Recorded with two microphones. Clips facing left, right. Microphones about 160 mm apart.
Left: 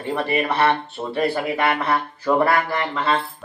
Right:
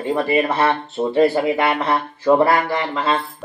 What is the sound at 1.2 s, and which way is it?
Speech, 20° right (ahead or behind).